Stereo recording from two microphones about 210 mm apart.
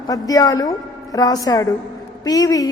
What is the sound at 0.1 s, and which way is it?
A woman's voice, 15° left (ahead or behind).